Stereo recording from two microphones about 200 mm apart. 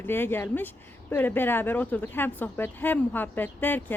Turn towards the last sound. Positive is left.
turn(degrees=10)  # may be behind; listen again after turning